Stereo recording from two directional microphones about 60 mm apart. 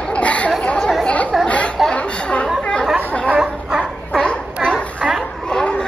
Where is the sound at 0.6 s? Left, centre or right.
Centre.